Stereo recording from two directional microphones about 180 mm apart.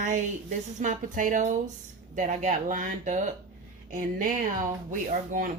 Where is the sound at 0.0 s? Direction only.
45° right (ahead or behind).